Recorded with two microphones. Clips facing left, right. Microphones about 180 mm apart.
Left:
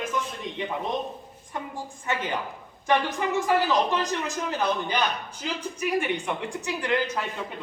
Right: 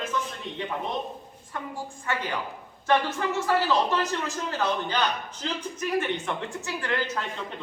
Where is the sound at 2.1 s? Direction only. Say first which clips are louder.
Left 2 dB; 20° left (ahead or behind).